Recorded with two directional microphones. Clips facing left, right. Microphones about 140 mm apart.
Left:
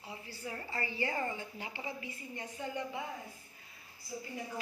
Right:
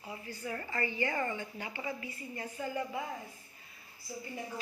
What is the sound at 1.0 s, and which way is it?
Speech, 15° left (ahead or behind).